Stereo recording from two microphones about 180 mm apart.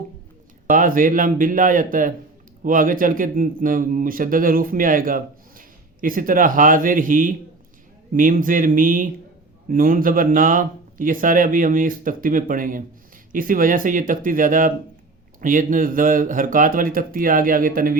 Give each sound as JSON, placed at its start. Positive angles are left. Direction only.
{"t": 0.7, "sound": "a man's voice", "side_deg": -50}